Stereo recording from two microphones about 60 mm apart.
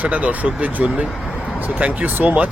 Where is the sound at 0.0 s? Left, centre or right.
Right.